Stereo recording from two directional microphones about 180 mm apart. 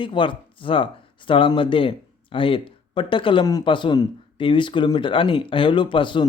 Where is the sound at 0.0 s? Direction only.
25° left (ahead or behind).